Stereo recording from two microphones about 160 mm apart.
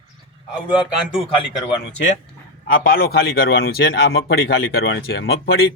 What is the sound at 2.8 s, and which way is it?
Speech, 75° left (ahead or behind).